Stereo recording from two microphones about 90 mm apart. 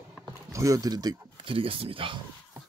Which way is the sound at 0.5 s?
40° right (ahead or behind).